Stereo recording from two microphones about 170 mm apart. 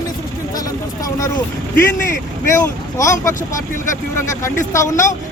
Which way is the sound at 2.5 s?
20° left (ahead or behind).